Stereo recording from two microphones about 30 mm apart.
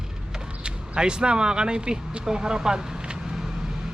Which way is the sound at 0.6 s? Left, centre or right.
Right.